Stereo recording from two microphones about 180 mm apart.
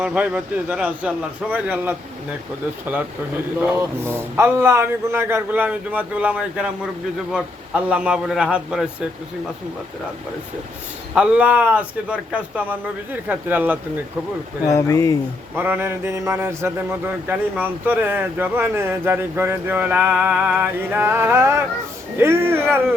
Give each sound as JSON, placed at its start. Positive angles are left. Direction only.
{"t": 0.0, "sound": "a man's voice", "side_deg": -5}
{"t": 3.6, "sound": "a man's voice", "side_deg": -10}
{"t": 11.1, "sound": "a man's voice", "side_deg": -5}
{"t": 14.7, "sound": "speech", "side_deg": 15}
{"t": 15.5, "sound": "a man's voice", "side_deg": -10}